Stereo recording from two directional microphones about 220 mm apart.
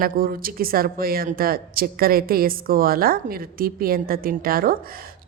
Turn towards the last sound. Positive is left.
turn(degrees=-40)  # may be behind; listen again after turning